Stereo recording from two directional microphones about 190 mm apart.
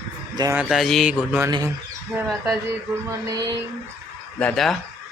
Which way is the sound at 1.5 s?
20° right (ahead or behind).